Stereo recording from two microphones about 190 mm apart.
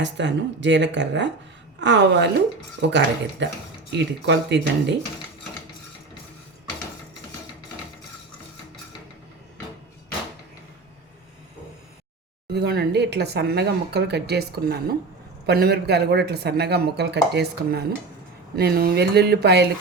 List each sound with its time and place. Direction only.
0.0 s speech: 70° right (ahead or behind)
12.5 s speech: 55° right (ahead or behind)